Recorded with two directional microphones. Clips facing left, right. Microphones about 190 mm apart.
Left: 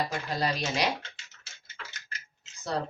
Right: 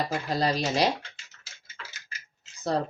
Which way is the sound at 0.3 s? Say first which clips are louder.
Right 4 dB; 35° right (ahead or behind).